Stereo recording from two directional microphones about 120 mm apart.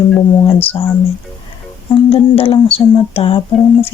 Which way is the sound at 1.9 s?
50° left (ahead or behind).